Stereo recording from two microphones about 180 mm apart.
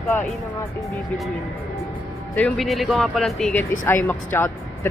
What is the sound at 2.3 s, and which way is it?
Speech, 5° left (ahead or behind).